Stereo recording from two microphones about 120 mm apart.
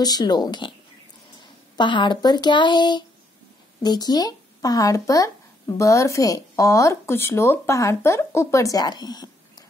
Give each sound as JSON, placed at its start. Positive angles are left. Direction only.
{"t": 0.0, "sound": "speech", "side_deg": 35}
{"t": 1.8, "sound": "speech", "side_deg": 40}